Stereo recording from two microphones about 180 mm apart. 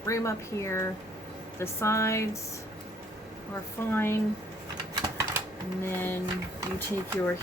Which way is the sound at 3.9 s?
15° left (ahead or behind).